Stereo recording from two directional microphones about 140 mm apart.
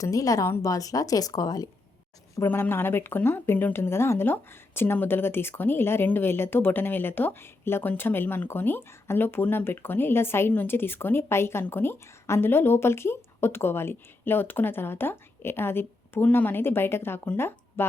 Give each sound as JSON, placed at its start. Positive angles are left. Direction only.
{"t": 0.0, "sound": "a woman's voice", "side_deg": 25}